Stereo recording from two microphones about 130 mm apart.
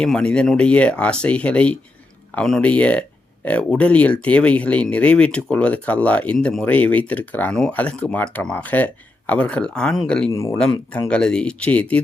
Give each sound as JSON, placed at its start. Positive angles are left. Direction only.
{"t": 0.0, "sound": "speech", "side_deg": 5}
{"t": 10.3, "sound": "speech", "side_deg": 25}
{"t": 11.1, "sound": "speech", "side_deg": 5}